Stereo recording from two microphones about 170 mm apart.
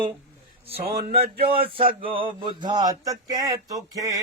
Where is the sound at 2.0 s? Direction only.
30° right (ahead or behind).